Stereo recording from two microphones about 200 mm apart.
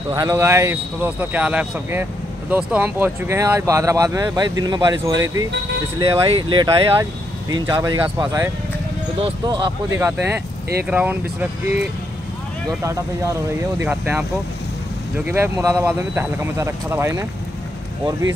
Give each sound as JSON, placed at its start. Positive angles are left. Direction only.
{"t": 0.1, "sound": "speech", "side_deg": -15}
{"t": 9.9, "sound": "speech", "side_deg": -10}
{"t": 12.8, "sound": "speech", "side_deg": -15}